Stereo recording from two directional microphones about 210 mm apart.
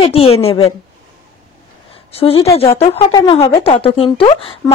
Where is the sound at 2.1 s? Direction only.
25° left (ahead or behind).